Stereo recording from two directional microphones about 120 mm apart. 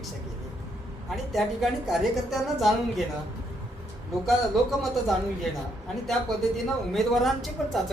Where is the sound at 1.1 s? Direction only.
Centre (ahead or behind).